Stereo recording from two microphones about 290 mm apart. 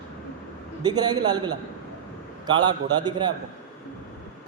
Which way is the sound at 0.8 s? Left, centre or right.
Centre.